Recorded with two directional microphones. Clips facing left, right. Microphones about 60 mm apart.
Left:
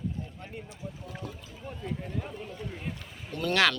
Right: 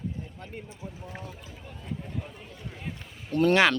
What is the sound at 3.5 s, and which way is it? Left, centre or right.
Speech, right.